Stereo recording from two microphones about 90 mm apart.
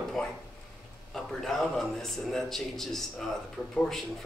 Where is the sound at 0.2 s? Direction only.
5° left (ahead or behind).